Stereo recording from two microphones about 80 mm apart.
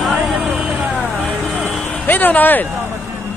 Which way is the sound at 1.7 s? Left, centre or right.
Left.